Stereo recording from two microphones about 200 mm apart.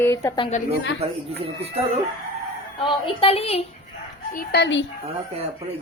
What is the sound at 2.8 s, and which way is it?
Speech, 30° left (ahead or behind).